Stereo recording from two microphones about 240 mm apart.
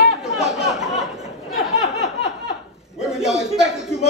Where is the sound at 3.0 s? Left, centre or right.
Centre.